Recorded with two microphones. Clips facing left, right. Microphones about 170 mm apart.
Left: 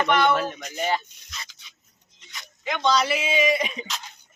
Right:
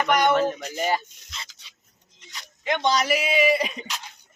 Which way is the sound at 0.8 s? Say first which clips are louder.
Even; 10° right (ahead or behind).